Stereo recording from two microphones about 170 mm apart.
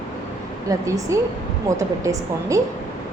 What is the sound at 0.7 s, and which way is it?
A woman's voice, 20° right (ahead or behind).